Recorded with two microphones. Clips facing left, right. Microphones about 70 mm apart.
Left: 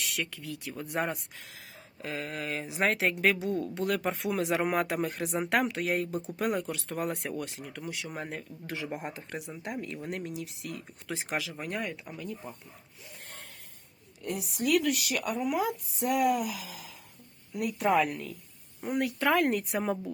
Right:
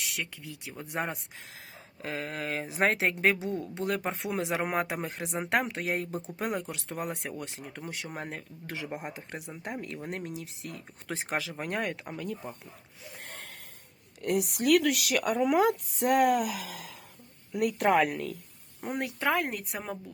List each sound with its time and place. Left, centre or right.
0.2 s speech: centre
2.0 s speech: right
7.6 s speech: right
10.0 s speech: right
12.1 s speech: right
13.2 s snort: right
14.2 s speech: right
15.5 s speech: right
19.2 s speech: centre